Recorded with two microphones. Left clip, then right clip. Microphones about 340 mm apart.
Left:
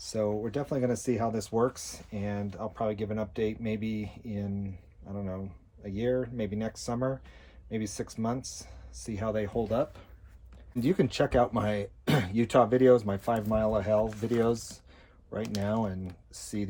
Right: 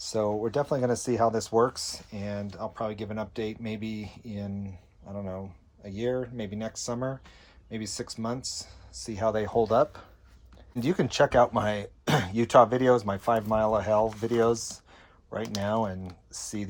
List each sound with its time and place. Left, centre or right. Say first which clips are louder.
0.1 s speech: right 3 dB; centre
10.8 s speech: right 3 dB; centre